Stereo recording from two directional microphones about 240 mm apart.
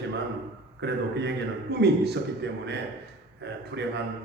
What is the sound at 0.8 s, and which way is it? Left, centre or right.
A man's voice, right.